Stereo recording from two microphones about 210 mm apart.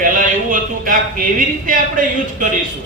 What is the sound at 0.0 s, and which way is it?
Speech, 40° right (ahead or behind).